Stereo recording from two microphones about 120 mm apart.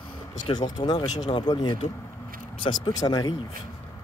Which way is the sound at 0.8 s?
35° left (ahead or behind).